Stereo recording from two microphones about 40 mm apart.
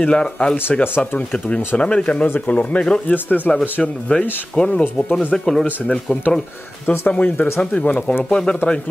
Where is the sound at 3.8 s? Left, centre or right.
Centre.